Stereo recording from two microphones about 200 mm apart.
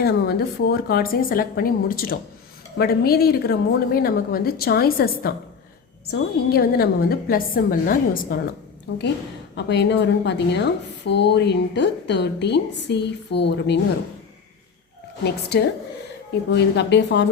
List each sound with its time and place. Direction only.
0.0 s a woman's voice: 55° left (ahead or behind)
8.9 s a woman's voice: 60° left (ahead or behind)
15.2 s a woman's voice: 55° left (ahead or behind)